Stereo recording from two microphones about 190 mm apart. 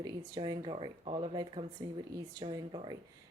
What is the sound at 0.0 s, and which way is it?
Speech, 20° right (ahead or behind).